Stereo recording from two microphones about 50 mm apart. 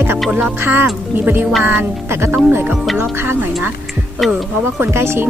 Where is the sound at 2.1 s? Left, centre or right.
Right.